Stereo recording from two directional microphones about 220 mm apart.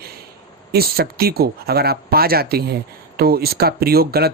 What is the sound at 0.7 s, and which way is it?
Speech, 45° right (ahead or behind).